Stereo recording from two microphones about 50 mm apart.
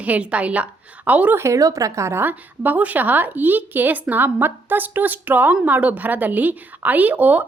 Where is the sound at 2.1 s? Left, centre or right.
Right.